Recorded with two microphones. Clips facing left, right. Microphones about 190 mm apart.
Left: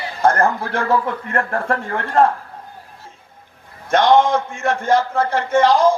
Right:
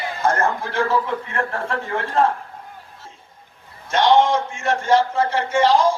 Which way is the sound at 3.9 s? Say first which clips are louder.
Left 2 dB; 55° left (ahead or behind).